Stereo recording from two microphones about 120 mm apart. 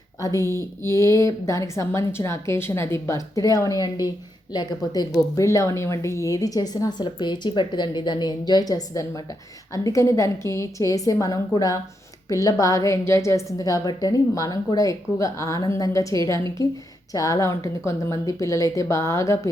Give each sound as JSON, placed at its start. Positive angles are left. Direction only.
{"t": 0.2, "sound": "a woman's voice", "side_deg": 25}